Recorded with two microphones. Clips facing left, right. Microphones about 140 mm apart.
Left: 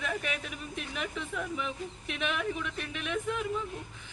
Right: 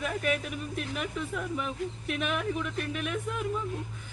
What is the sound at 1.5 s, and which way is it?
Speech, 45° right (ahead or behind).